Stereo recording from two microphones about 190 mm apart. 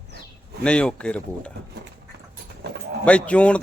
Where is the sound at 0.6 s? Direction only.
5° left (ahead or behind).